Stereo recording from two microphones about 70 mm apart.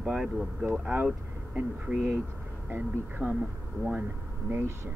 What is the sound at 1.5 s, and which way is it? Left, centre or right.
Speech, right.